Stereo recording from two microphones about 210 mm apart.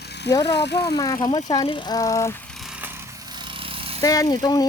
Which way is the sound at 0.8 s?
15° left (ahead or behind).